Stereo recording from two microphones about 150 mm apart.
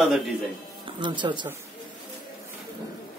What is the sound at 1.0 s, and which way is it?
Speech, 30° right (ahead or behind).